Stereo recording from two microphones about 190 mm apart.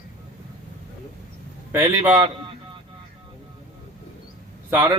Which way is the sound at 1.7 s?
10° right (ahead or behind).